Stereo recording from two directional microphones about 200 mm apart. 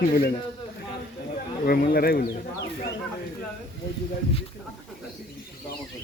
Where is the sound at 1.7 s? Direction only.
50° left (ahead or behind).